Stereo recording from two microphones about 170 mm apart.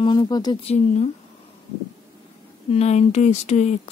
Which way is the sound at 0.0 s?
25° left (ahead or behind).